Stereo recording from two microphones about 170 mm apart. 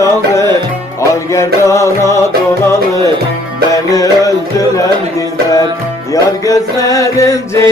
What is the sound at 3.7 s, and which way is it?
Music, 20° left (ahead or behind).